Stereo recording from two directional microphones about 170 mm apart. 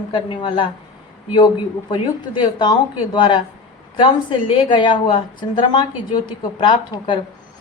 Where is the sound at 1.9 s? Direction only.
25° left (ahead or behind).